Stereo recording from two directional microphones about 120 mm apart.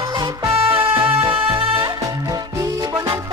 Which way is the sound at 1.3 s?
50° right (ahead or behind).